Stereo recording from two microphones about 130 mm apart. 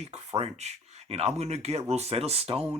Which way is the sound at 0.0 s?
55° right (ahead or behind).